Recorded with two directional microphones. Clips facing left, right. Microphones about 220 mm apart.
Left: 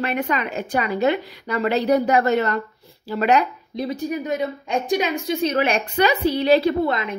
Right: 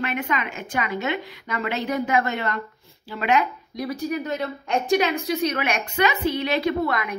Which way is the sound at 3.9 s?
20° left (ahead or behind).